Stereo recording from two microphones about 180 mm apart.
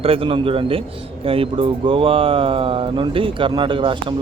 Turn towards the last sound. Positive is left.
turn(degrees=-30)  # may be behind; listen again after turning